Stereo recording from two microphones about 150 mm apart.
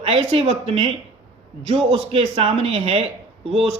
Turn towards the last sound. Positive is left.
turn(degrees=-40)  # may be behind; listen again after turning